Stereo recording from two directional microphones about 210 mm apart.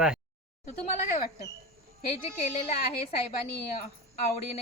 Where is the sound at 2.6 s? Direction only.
30° left (ahead or behind).